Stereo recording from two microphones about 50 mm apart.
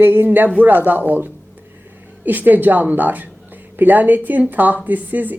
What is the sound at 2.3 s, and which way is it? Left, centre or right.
A woman's voice, right.